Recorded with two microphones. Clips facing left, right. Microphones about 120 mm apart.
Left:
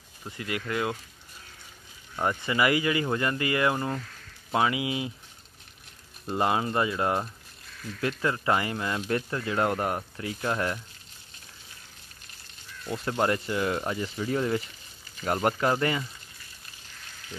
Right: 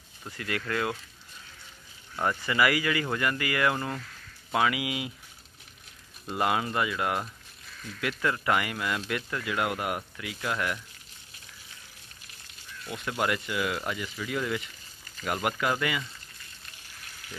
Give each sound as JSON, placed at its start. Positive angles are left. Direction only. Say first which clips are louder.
{"t": 0.3, "sound": "speech", "louder": "even", "side_deg": 20}
{"t": 2.1, "sound": "speech", "louder": "even", "side_deg": 20}
{"t": 6.3, "sound": "speech", "louder": "left 2 dB", "side_deg": 25}
{"t": 12.8, "sound": "speech", "louder": "left 3 dB", "side_deg": 35}